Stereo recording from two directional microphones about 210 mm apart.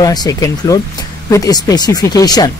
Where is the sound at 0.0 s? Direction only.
20° left (ahead or behind).